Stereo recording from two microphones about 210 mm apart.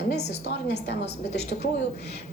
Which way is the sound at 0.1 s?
55° left (ahead or behind).